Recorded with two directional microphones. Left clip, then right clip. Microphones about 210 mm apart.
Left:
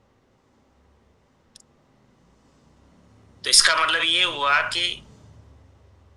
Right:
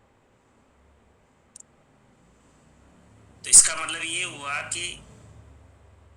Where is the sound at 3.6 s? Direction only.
65° left (ahead or behind).